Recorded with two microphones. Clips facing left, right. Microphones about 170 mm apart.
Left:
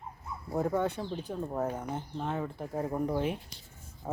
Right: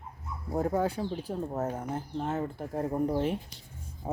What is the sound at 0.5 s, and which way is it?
Speech, 5° right (ahead or behind).